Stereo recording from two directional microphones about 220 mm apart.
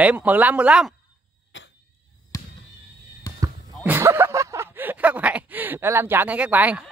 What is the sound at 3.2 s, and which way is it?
Basketball bounce, 15° left (ahead or behind).